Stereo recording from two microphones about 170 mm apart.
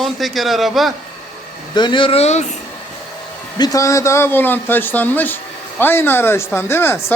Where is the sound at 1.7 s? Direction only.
25° left (ahead or behind).